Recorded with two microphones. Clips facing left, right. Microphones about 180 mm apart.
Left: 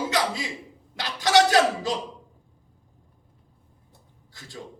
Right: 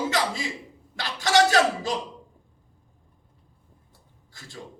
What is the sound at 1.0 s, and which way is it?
Speech, 20° left (ahead or behind).